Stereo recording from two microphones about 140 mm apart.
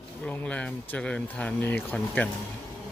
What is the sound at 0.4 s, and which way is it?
Speech, 10° left (ahead or behind).